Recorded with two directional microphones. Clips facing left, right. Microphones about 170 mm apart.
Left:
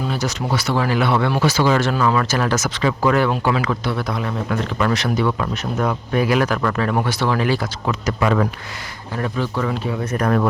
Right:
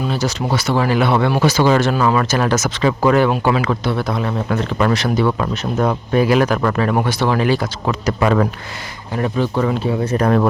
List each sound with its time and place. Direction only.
0.1 s speech: 30° right (ahead or behind)
7.9 s speech: 40° right (ahead or behind)
9.1 s speech: 20° right (ahead or behind)